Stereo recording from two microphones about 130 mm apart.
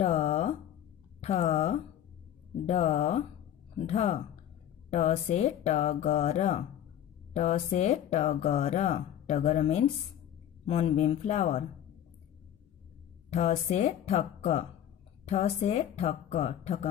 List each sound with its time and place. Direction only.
0.0 s a sound: 55° left (ahead or behind)
1.2 s speech: 55° left (ahead or behind)
13.3 s speech: 60° left (ahead or behind)